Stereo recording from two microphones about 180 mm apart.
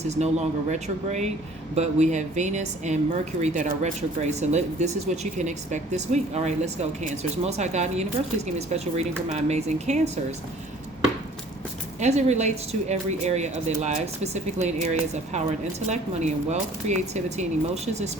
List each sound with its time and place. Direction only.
0.0 s speech: 40° right (ahead or behind)
11.9 s speech: 40° right (ahead or behind)